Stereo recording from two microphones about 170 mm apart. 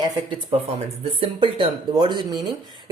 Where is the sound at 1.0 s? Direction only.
35° right (ahead or behind).